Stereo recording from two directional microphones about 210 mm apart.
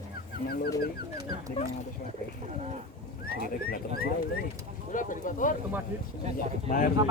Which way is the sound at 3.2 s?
45° left (ahead or behind).